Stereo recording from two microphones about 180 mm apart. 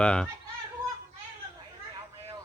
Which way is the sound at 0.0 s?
5° left (ahead or behind).